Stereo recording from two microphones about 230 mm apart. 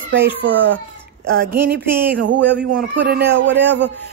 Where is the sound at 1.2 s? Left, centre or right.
Right.